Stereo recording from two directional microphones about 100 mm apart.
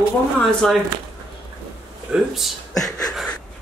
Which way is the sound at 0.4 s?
5° left (ahead or behind).